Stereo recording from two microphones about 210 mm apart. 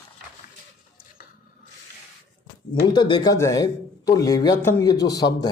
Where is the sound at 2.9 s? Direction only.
20° left (ahead or behind).